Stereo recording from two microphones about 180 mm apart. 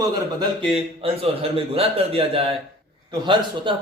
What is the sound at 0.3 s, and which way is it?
A man's voice, 30° right (ahead or behind).